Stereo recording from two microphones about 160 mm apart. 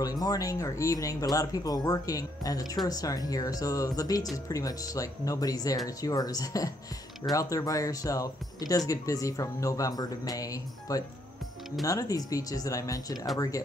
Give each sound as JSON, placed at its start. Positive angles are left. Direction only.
{"t": 0.0, "sound": "speech", "side_deg": 25}